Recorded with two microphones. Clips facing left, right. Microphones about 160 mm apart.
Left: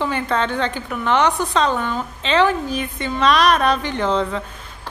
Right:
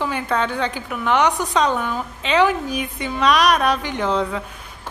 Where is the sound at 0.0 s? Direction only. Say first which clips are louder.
Left 1 dB; 5° right (ahead or behind).